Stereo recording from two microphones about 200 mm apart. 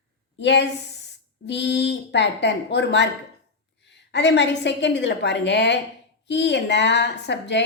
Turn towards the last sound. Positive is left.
turn(degrees=60)  # may be behind; listen again after turning